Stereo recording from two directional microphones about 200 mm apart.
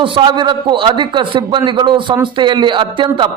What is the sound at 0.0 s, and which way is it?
A man's voice, 25° right (ahead or behind).